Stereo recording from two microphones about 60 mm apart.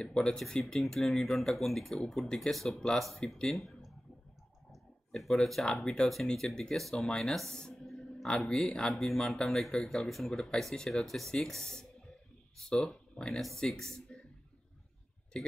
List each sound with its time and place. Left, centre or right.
0.0 s speech: centre
5.1 s speech: centre
7.8 s a sound: centre
8.4 s speech: centre
15.3 s speech: centre